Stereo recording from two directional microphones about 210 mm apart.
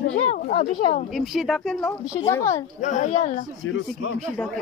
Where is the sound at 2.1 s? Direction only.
15° left (ahead or behind).